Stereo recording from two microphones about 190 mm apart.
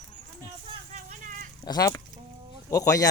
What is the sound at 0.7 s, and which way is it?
Vehicle, 40° right (ahead or behind).